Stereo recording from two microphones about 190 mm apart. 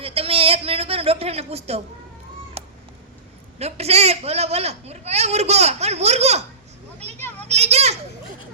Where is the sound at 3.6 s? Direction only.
35° right (ahead or behind).